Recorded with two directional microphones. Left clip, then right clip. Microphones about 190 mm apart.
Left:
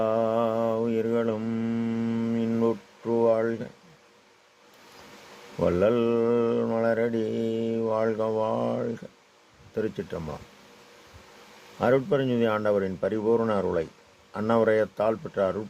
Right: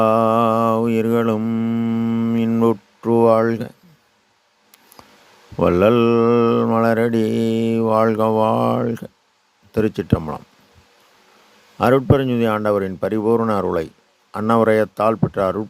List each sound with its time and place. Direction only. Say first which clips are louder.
0.0 s mantra: right 9 dB; 45° right (ahead or behind)
5.5 s speech: right 8 dB; 45° right (ahead or behind)
11.8 s speech: right 7 dB; 45° right (ahead or behind)